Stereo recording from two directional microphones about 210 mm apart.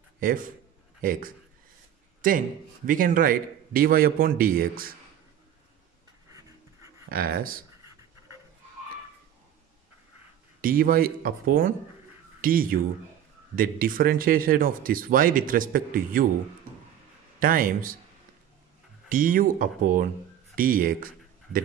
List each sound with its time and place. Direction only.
0.2 s speech: 40° right (ahead or behind)
2.2 s speech: 40° right (ahead or behind)
7.1 s speech: 45° right (ahead or behind)
7.8 s writing: 15° right (ahead or behind)
10.6 s speech: 45° right (ahead or behind)
17.4 s speech: 40° right (ahead or behind)
19.0 s speech: 40° right (ahead or behind)